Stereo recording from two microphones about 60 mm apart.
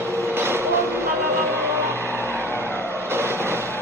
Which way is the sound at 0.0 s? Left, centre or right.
Right.